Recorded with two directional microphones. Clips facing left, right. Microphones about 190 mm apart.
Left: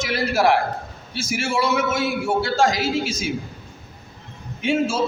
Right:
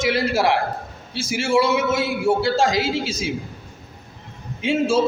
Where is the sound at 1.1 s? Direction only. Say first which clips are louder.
Right 4 dB; 30° right (ahead or behind).